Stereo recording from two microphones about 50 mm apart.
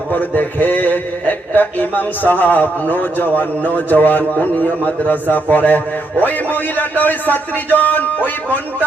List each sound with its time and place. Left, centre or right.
0.1 s a man's voice: left